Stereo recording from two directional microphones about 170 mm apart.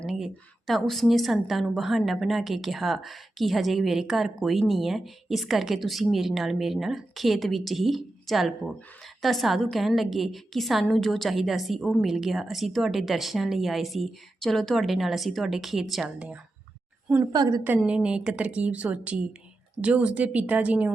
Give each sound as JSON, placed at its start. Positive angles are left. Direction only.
{"t": 0.0, "sound": "a sound", "side_deg": -5}
{"t": 0.7, "sound": "a woman's voice", "side_deg": 0}
{"t": 17.3, "sound": "a woman's voice", "side_deg": -25}
{"t": 17.7, "sound": "a woman's voice", "side_deg": -5}